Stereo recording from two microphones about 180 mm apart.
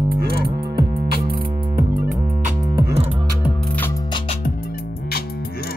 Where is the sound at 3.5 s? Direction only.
5° left (ahead or behind); by 4.3 s 25° left (ahead or behind).